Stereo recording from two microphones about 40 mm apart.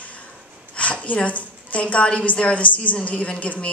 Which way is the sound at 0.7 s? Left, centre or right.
Left.